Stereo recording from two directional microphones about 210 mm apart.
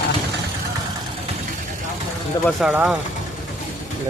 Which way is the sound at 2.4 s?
5° right (ahead or behind).